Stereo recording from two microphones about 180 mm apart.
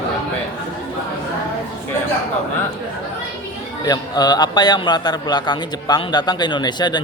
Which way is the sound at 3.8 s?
20° left (ahead or behind).